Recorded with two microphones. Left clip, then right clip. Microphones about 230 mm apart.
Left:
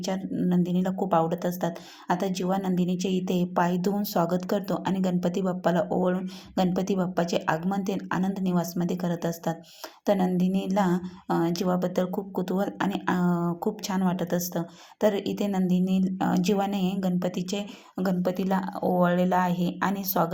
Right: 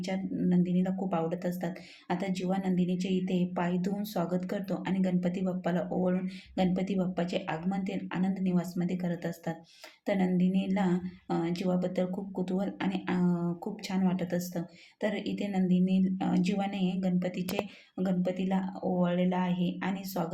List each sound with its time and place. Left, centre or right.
0.0 s speech: centre